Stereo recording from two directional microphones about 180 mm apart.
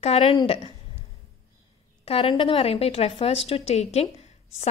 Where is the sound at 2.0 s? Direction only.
30° left (ahead or behind).